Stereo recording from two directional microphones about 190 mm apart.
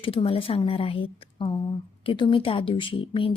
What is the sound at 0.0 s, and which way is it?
A woman's voice, 30° left (ahead or behind).